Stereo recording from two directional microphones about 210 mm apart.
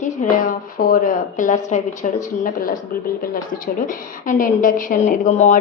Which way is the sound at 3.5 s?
40° left (ahead or behind).